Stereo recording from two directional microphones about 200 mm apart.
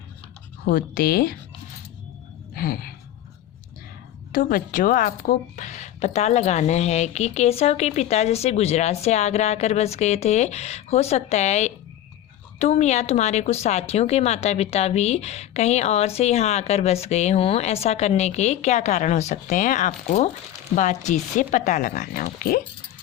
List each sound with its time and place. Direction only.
0.6 s speech: 45° left (ahead or behind)
2.6 s speech: 45° left (ahead or behind)
4.3 s speech: 45° left (ahead or behind)